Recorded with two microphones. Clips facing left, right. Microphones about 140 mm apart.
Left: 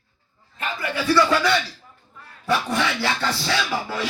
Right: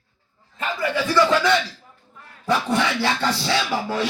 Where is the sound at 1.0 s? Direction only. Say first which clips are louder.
Even; 20° right (ahead or behind).